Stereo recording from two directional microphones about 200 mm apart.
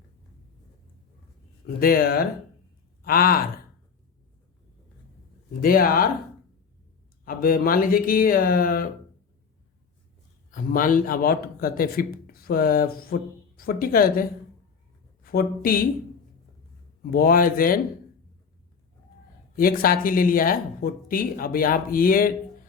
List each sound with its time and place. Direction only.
1.6 s speech: 45° left (ahead or behind)
5.6 s speech: 45° left (ahead or behind)
7.3 s speech: 45° left (ahead or behind)
10.5 s speech: 45° left (ahead or behind)
17.1 s speech: 50° left (ahead or behind)
19.5 s speech: 45° left (ahead or behind)